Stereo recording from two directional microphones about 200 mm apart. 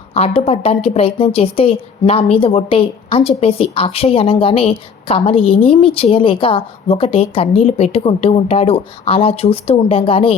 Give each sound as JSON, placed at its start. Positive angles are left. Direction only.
{"t": 0.1, "sound": "a woman's voice", "side_deg": 30}